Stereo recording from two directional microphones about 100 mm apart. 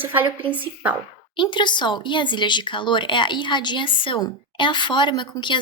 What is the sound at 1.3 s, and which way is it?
Speech, 50° left (ahead or behind).